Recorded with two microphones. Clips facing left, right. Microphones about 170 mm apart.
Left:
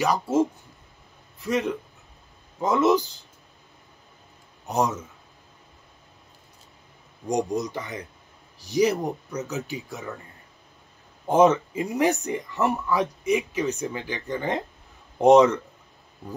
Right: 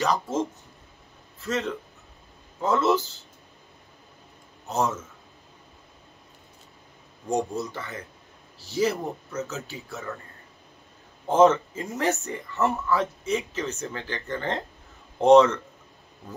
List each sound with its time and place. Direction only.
0.0 s speech: 15° left (ahead or behind)
4.6 s speech: 15° left (ahead or behind)
7.2 s speech: 15° left (ahead or behind)
11.2 s speech: 15° left (ahead or behind)